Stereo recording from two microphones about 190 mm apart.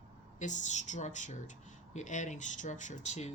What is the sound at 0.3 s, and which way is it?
Speech, 40° left (ahead or behind).